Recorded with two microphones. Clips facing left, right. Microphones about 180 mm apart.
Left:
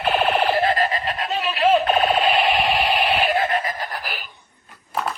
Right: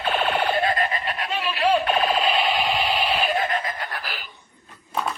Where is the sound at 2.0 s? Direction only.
25° left (ahead or behind).